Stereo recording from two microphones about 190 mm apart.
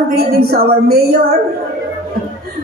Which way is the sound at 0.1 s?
55° right (ahead or behind).